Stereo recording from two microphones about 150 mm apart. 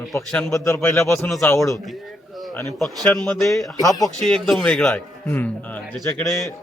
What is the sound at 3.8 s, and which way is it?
Speech, 25° left (ahead or behind).